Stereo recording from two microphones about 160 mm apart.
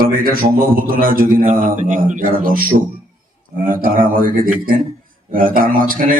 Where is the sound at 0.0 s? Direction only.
65° right (ahead or behind).